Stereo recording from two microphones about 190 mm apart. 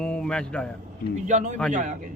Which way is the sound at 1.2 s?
40° right (ahead or behind).